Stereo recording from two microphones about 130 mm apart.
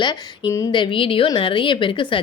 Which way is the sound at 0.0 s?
35° left (ahead or behind).